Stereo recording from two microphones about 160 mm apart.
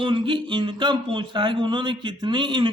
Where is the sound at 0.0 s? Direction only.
30° right (ahead or behind).